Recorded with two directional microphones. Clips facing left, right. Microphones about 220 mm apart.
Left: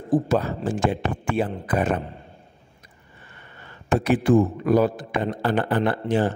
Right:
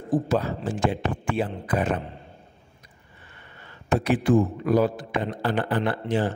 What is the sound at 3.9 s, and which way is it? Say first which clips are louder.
A man's voice: left 2 dB; 50° left (ahead or behind).